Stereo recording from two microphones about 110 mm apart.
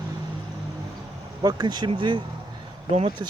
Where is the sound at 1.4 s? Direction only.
35° right (ahead or behind).